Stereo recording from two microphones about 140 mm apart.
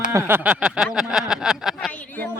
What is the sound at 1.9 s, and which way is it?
Speech, 15° left (ahead or behind).